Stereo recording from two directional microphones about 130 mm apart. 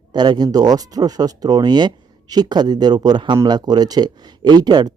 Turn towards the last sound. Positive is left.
turn(degrees=-30)  # may be behind; listen again after turning